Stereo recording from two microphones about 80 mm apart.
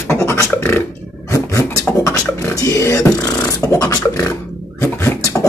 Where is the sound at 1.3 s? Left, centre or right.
Left.